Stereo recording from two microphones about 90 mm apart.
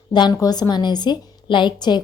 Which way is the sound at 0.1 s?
55° left (ahead or behind).